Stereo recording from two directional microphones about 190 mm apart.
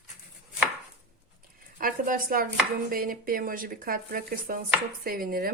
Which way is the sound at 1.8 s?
45° right (ahead or behind).